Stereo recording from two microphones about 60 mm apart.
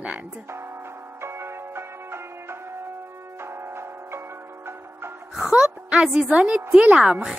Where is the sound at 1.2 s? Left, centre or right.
Right.